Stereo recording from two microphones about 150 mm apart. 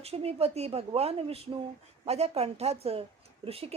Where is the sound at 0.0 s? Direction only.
45° right (ahead or behind).